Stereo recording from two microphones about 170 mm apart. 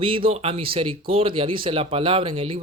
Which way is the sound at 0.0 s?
30° right (ahead or behind).